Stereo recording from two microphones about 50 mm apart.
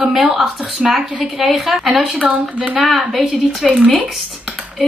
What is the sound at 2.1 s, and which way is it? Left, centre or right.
Speech, right.